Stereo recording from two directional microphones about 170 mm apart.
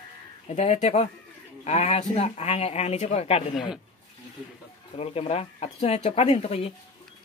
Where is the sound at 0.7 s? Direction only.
45° left (ahead or behind).